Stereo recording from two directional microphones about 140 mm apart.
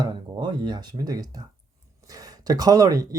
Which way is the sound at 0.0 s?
30° right (ahead or behind).